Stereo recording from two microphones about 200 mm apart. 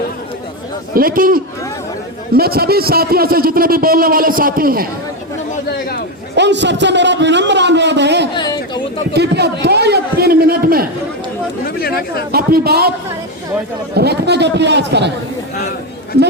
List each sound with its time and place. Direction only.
0.9 s a man's voice: 45° right (ahead or behind)
6.3 s a man's voice: 60° right (ahead or behind)
8.4 s chatter: 20° left (ahead or behind)
9.1 s a man's voice: 55° right (ahead or behind)
11.6 s chatter: 50° left (ahead or behind)
12.3 s a man's voice: 50° right (ahead or behind)
13.9 s a man's voice: 55° right (ahead or behind)